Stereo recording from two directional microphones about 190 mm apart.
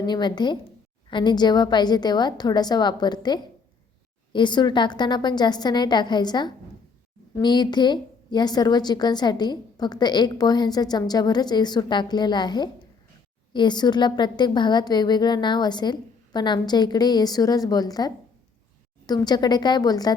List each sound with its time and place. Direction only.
0.0 s a woman's voice: 25° left (ahead or behind)